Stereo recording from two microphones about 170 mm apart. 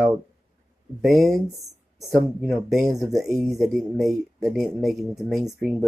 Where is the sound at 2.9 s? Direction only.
20° right (ahead or behind).